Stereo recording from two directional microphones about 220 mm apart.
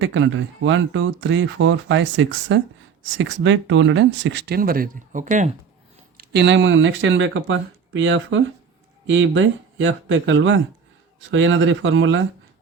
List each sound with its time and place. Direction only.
0.0 s speech: 60° right (ahead or behind); by 5.5 s 35° right (ahead or behind)
6.1 s speech: 50° right (ahead or behind)